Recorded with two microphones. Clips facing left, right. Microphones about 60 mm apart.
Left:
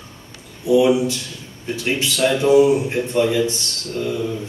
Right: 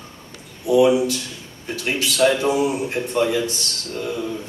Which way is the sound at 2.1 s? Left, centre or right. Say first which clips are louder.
Left 4 dB; right.